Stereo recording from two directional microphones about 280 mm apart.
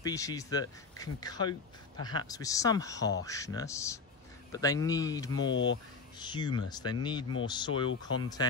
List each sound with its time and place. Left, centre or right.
0.0 s speech: centre
5.5 s speech: left
6.1 s speech: centre